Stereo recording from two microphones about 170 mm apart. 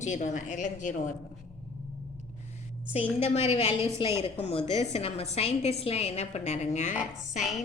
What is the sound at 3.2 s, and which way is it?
A woman's voice, 40° left (ahead or behind).